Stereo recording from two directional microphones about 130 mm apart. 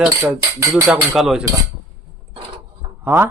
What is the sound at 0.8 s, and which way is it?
Speech, centre (ahead or behind).